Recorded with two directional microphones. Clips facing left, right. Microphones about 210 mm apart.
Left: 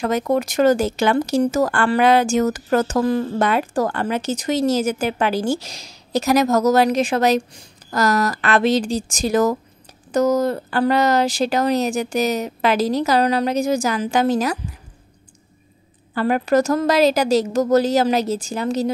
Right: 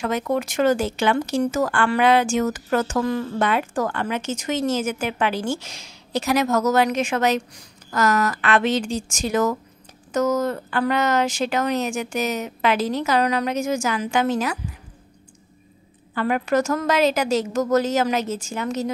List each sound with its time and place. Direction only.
0.0 s speech: 40° left (ahead or behind)
16.2 s speech: 35° left (ahead or behind)